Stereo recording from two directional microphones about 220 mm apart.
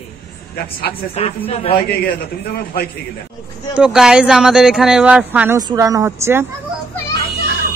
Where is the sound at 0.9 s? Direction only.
25° left (ahead or behind).